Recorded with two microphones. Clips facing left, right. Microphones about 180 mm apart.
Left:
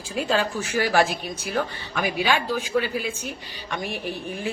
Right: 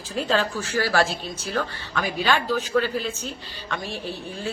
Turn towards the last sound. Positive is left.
turn(degrees=15)  # may be behind; listen again after turning